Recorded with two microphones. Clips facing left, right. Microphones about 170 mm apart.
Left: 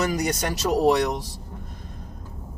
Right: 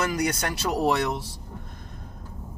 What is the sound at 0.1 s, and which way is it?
Speech, 40° left (ahead or behind).